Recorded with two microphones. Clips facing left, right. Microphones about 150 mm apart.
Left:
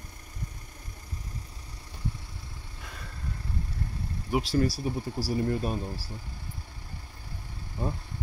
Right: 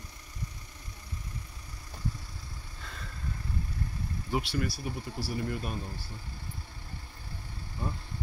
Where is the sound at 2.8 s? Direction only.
10° left (ahead or behind).